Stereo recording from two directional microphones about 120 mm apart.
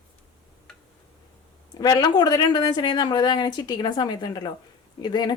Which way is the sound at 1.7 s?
35° left (ahead or behind).